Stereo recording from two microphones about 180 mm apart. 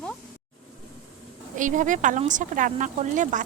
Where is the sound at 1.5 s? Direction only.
45° right (ahead or behind).